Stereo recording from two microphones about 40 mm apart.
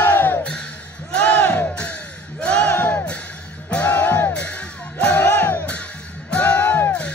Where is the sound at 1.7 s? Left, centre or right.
Left.